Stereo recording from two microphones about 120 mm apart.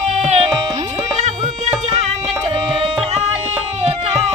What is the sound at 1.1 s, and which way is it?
Music, 65° right (ahead or behind).